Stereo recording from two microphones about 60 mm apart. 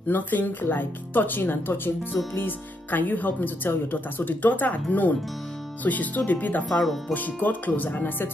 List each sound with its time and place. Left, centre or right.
0.1 s speech: left